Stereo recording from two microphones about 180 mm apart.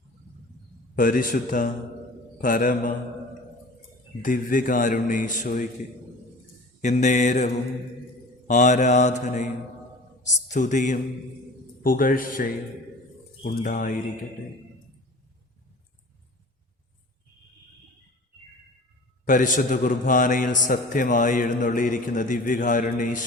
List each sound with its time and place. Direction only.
0.9 s a man's voice: 50° left (ahead or behind)
4.2 s a man's voice: 50° left (ahead or behind)
6.8 s mantra: 40° left (ahead or behind)
10.2 s a man's voice: 45° left (ahead or behind)
19.2 s a man's voice: 45° left (ahead or behind)